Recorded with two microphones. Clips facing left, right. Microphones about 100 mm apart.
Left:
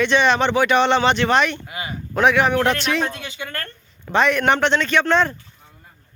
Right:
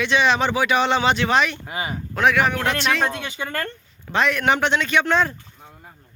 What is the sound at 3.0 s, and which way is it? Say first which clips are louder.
Speech: right 2 dB; 30° right (ahead or behind).